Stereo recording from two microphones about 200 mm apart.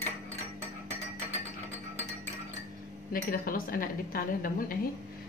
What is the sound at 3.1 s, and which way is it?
A woman's voice, 45° left (ahead or behind).